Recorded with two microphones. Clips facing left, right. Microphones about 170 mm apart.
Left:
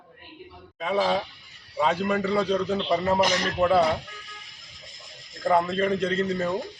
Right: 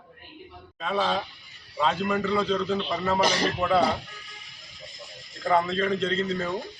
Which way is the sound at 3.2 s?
30° right (ahead or behind).